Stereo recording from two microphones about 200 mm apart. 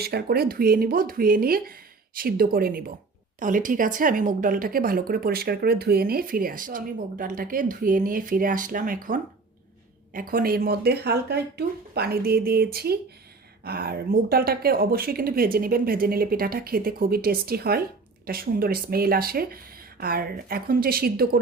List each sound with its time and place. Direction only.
0.0 s a woman's voice: 50° right (ahead or behind)